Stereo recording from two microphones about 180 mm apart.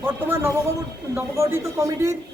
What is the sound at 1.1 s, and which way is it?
A man's voice, 15° right (ahead or behind).